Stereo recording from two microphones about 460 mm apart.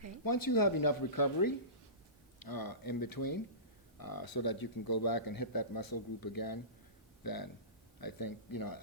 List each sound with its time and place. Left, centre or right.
0.3 s speech: left